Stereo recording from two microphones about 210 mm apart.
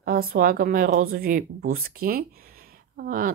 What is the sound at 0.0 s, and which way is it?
A woman's voice, 45° right (ahead or behind).